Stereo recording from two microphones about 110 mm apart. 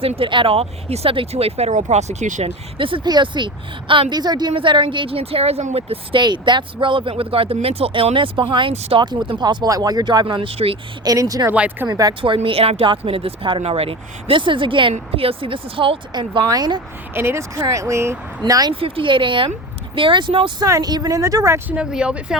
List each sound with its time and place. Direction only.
0.0 s speech: 55° right (ahead or behind); by 2.5 s 90° right
2.7 s speech: 50° right (ahead or behind)
11.0 s speech: 35° right (ahead or behind)
11.5 s speech: 10° right (ahead or behind)
11.9 s speech: 35° right (ahead or behind)
12.2 s speech: 55° right (ahead or behind)
13.6 s speech: 65° right (ahead or behind)
16.5 s speech: 40° right (ahead or behind)
17.2 s speech: 25° right (ahead or behind)
18.7 s speech: 55° right (ahead or behind)
20.7 s speech: 35° right (ahead or behind)
21.7 s speech: 10° right (ahead or behind)